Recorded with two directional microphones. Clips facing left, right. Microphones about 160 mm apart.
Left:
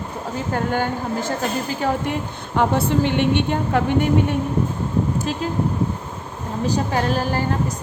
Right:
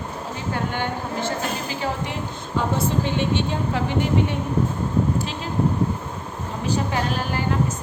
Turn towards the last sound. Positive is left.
turn(degrees=40)  # may be behind; listen again after turning